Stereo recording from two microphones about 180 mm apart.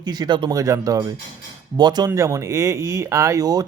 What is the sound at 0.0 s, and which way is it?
Speech, 25° right (ahead or behind).